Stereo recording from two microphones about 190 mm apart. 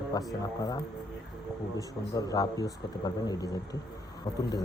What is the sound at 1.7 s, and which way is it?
A man's voice, 20° left (ahead or behind).